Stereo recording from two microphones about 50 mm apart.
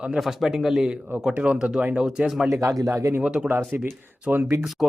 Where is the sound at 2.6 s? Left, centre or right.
Right.